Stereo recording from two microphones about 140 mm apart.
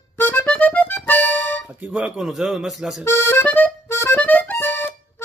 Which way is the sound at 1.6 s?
10° right (ahead or behind).